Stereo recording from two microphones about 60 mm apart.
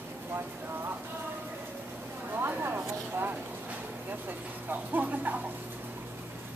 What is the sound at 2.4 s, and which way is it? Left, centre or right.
Speech, right.